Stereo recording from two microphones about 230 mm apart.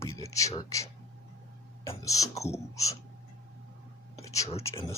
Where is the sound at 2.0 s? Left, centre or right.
Centre.